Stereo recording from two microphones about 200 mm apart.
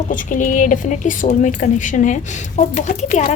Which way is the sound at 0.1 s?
40° left (ahead or behind).